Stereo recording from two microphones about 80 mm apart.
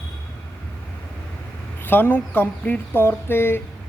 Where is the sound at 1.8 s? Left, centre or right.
Left.